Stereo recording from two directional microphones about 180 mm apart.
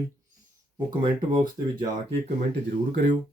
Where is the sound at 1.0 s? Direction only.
20° right (ahead or behind).